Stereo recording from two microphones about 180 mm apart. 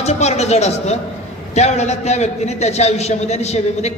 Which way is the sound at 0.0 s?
35° left (ahead or behind).